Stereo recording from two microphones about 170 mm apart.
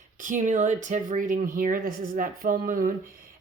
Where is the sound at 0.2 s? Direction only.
50° right (ahead or behind).